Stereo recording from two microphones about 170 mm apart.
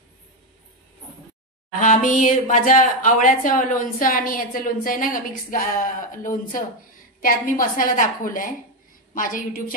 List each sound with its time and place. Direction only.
1.8 s speech: 50° left (ahead or behind)